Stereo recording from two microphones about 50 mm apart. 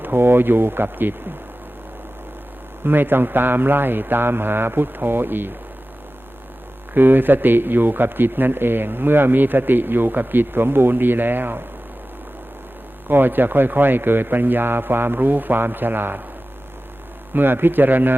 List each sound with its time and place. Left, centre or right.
0.0 s a man's voice: right
2.8 s a man's voice: right
6.9 s a man's voice: right
13.1 s a man's voice: right
17.3 s a man's voice: right